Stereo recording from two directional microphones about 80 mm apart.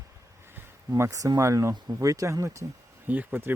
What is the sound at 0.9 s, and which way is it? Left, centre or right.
Speech, right.